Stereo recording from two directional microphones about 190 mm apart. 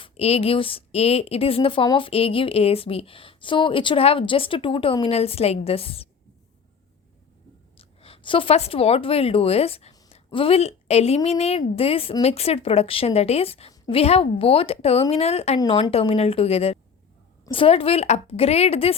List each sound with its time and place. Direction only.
0.0 s a woman's voice: 30° left (ahead or behind)
7.8 s a woman's voice: 30° left (ahead or behind)